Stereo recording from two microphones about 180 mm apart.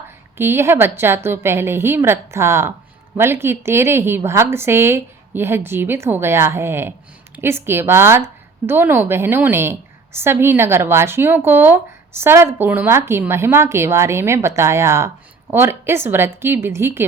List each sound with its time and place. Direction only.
0.3 s speech: 15° right (ahead or behind)